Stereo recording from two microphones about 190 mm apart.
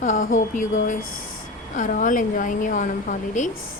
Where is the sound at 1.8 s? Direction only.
45° left (ahead or behind).